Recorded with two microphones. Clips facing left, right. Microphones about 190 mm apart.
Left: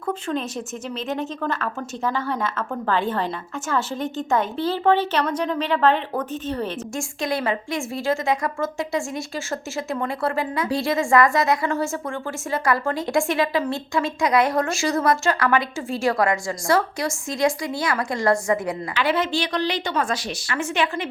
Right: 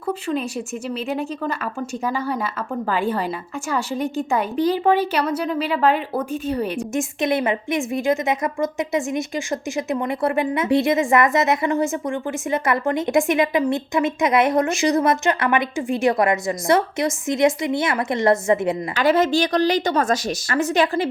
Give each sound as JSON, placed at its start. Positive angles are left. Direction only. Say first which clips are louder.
{"t": 0.1, "sound": "a woman's voice", "louder": "right 2 dB", "side_deg": -10}
{"t": 18.9, "sound": "a woman's voice", "louder": "right 5 dB", "side_deg": -45}